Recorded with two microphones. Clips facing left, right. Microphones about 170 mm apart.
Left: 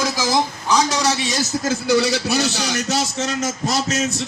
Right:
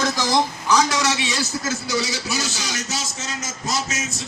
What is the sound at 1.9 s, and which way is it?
A man's voice, 60° left (ahead or behind).